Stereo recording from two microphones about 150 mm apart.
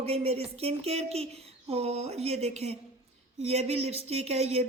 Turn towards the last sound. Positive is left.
turn(degrees=-45)  # may be behind; listen again after turning